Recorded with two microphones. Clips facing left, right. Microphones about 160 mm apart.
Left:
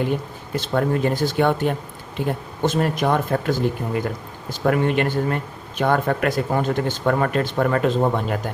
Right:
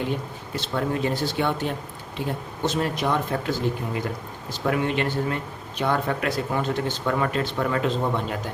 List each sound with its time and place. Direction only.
0.5 s speech: 50° left (ahead or behind)